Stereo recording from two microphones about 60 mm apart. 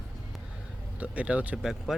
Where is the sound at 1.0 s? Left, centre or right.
Right.